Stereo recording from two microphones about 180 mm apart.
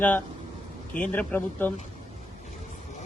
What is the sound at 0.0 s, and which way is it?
Speech, 10° left (ahead or behind).